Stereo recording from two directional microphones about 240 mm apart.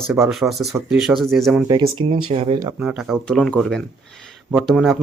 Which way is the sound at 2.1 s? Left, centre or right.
Right.